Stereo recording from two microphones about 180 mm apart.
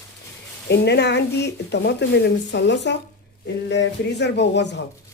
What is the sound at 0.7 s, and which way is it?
Speech, 70° left (ahead or behind).